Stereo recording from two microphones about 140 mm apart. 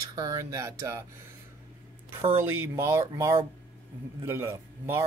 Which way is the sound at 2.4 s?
15° right (ahead or behind).